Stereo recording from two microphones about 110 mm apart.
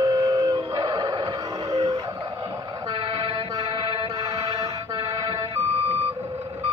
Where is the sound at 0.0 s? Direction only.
30° right (ahead or behind).